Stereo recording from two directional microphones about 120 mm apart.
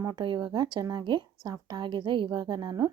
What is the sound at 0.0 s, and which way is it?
A woman's voice, 30° right (ahead or behind).